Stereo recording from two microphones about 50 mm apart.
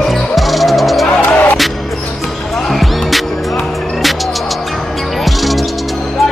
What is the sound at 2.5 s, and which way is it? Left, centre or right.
Music, centre.